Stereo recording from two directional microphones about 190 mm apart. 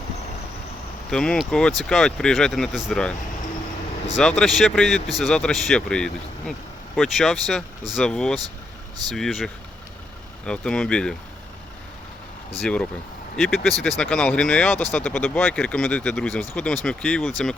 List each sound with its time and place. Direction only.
1.1 s speech: 5° left (ahead or behind)
4.2 s speech: centre (ahead or behind)
12.6 s speech: 5° left (ahead or behind)